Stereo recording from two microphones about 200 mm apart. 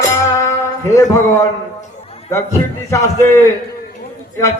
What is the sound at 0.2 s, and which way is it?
Music, 15° left (ahead or behind).